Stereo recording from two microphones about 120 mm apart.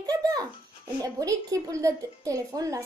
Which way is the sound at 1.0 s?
30° right (ahead or behind).